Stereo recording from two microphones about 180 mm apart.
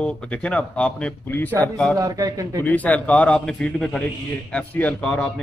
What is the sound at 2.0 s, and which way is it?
Speech, 20° right (ahead or behind).